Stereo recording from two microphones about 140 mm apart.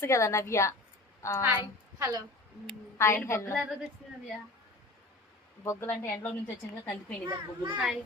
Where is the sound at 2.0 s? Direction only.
20° right (ahead or behind).